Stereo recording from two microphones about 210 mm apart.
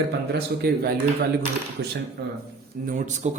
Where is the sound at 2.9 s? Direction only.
35° right (ahead or behind).